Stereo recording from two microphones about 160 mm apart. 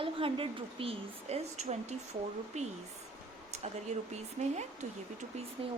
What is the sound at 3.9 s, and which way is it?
Speech, 45° right (ahead or behind).